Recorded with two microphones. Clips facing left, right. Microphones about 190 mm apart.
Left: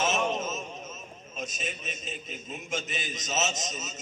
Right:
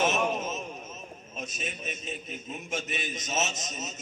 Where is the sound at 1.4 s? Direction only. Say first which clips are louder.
Left 1 dB; 60° right (ahead or behind).